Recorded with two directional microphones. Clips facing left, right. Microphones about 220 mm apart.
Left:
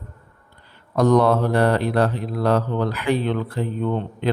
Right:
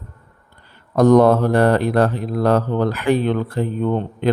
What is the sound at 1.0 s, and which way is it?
Mantra, 45° right (ahead or behind).